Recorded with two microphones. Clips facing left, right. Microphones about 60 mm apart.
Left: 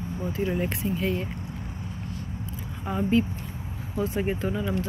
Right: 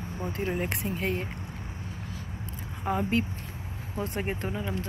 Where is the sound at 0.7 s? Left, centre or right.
Right.